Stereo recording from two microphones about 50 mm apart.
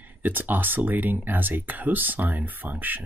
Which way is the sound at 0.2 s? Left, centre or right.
Right.